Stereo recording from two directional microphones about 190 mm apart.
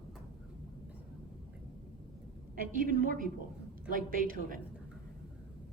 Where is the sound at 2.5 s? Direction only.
45° right (ahead or behind).